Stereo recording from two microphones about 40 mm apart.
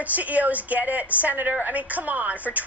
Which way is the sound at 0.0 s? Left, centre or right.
Right.